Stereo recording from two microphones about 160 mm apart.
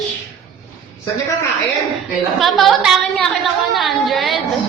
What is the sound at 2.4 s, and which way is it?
A woman's voice, centre (ahead or behind).